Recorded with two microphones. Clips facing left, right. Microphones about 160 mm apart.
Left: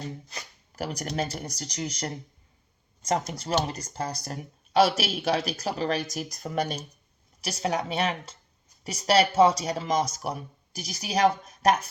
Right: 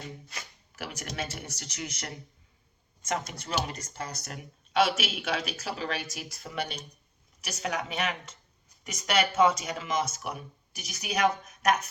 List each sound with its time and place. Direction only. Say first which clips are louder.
0.0 s speech: left 4 dB; 35° left (ahead or behind)